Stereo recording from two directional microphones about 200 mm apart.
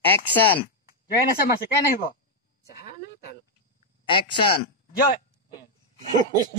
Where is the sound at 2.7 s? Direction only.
50° left (ahead or behind).